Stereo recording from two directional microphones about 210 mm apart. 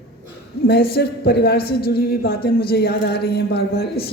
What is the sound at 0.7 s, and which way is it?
A woman's voice, 50° left (ahead or behind).